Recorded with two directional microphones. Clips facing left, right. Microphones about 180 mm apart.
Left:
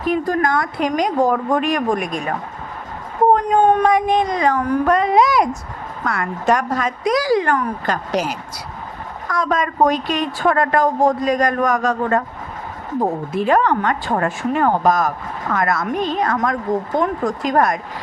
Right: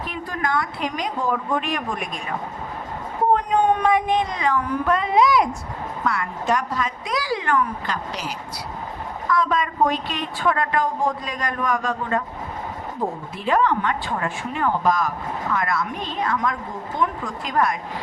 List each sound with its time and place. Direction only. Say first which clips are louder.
0.1 s a woman's voice: left 9 dB; 45° left (ahead or behind)
3.3 s a woman's voice: left 2 dB; 45° left (ahead or behind)